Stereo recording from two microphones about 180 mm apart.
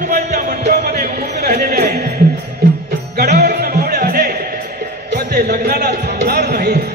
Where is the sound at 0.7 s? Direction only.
60° right (ahead or behind).